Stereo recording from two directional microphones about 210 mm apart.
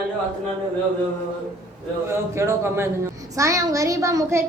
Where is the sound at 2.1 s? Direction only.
10° right (ahead or behind).